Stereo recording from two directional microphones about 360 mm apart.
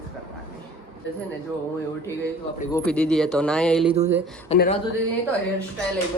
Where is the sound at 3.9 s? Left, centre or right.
Centre.